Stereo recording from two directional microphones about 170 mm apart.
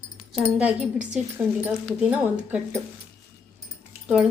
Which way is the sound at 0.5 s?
5° right (ahead or behind).